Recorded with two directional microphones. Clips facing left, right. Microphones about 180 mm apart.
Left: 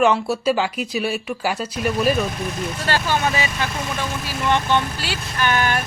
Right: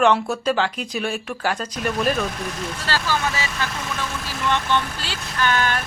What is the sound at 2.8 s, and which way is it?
Speech, 20° left (ahead or behind).